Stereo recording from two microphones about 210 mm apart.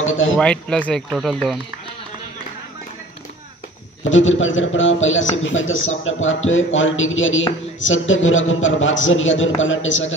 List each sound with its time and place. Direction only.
0.0 s speech: 70° left (ahead or behind)
0.4 s speech: 5° left (ahead or behind)
4.0 s a man's voice: 65° left (ahead or behind)